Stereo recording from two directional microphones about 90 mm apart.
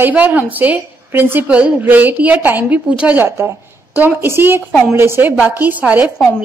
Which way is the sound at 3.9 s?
20° right (ahead or behind).